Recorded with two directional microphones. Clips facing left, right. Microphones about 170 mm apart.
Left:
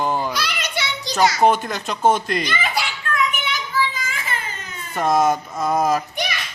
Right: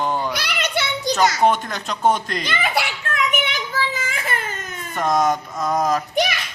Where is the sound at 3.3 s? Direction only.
65° right (ahead or behind).